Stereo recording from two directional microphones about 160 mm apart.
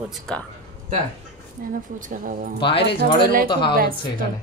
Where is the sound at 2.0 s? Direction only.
55° right (ahead or behind).